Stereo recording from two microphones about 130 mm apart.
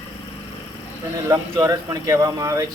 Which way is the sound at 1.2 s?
25° right (ahead or behind).